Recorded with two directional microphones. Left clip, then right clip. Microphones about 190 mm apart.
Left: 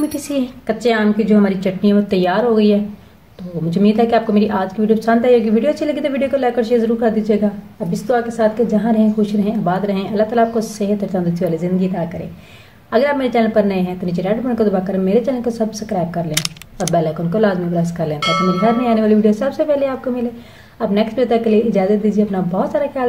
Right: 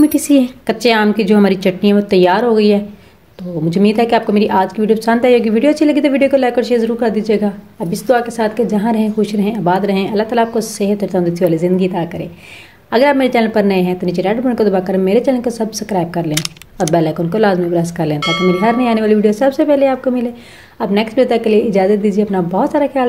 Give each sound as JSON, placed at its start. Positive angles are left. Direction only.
{"t": 0.1, "sound": "a woman's voice", "side_deg": -35}
{"t": 16.3, "sound": "speech", "side_deg": 0}
{"t": 16.9, "sound": "a woman's voice", "side_deg": -35}
{"t": 18.2, "sound": "speech", "side_deg": 0}
{"t": 18.6, "sound": "a woman's voice", "side_deg": -35}